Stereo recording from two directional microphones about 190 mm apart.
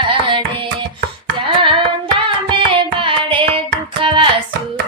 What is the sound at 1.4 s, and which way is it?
Hands, 25° right (ahead or behind).